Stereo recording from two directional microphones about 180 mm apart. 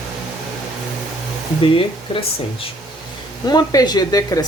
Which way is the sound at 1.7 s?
30° left (ahead or behind).